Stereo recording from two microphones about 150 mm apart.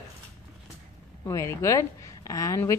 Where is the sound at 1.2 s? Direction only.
20° left (ahead or behind).